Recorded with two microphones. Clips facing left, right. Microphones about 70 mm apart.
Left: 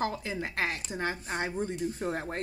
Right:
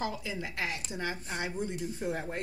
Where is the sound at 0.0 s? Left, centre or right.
Left.